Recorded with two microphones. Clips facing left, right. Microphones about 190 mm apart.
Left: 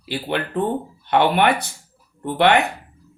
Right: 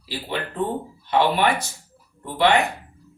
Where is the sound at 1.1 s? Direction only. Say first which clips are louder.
Left 3 dB; 65° left (ahead or behind).